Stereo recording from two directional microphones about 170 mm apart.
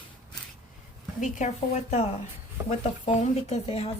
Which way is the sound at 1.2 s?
45° left (ahead or behind).